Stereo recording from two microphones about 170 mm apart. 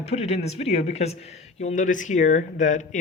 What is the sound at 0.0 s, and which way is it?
Speech, 40° left (ahead or behind).